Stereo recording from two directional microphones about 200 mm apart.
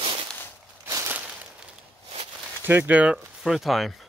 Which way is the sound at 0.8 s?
15° right (ahead or behind).